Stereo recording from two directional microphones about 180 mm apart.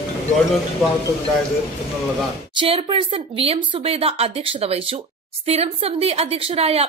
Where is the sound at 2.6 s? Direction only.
30° right (ahead or behind).